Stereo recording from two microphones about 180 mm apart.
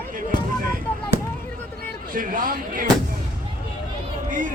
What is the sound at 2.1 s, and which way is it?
Slam, 50° right (ahead or behind).